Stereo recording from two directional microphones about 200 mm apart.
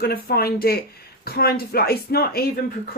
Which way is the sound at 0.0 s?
50° left (ahead or behind).